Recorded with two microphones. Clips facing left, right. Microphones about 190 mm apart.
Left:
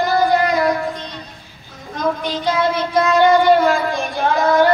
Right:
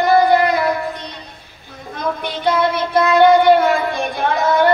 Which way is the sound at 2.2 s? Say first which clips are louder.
Right 4 dB; 60° right (ahead or behind).